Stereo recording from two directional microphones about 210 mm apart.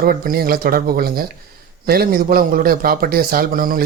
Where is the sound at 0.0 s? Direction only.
45° right (ahead or behind).